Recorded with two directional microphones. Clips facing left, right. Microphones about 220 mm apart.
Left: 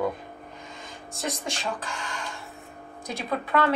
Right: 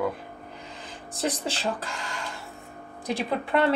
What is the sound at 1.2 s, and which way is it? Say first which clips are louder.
Speech: right 3 dB; 35° right (ahead or behind).